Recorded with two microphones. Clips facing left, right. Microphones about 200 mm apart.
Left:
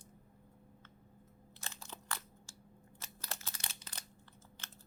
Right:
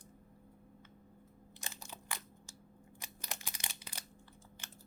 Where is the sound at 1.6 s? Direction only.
15° right (ahead or behind).